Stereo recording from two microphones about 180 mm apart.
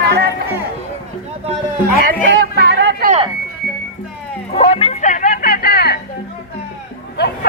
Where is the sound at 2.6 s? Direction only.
75° right (ahead or behind).